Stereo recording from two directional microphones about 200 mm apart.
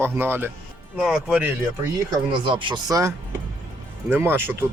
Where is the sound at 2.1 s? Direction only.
25° right (ahead or behind).